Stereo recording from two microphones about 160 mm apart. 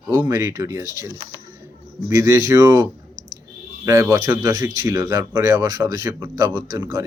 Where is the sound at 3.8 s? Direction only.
20° right (ahead or behind).